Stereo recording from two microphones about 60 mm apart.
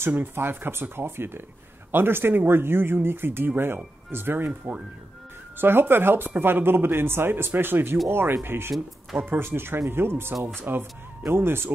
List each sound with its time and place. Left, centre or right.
0.3 s speech: right
4.5 s speech: right
5.6 s speech: right
9.1 s speech: right
9.5 s speech: right